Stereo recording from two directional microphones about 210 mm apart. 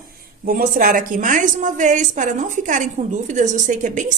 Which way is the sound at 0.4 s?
45° right (ahead or behind).